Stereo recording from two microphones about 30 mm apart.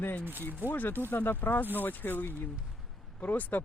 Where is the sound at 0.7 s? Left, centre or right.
Left.